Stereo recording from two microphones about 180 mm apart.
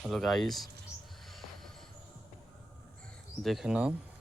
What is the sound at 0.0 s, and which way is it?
Speech, centre (ahead or behind).